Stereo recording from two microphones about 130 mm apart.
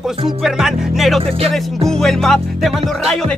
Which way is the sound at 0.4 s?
5° right (ahead or behind).